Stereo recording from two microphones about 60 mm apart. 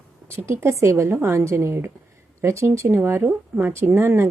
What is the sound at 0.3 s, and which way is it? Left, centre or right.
A woman's voice, right.